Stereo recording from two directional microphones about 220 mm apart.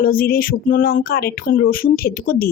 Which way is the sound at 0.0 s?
40° left (ahead or behind).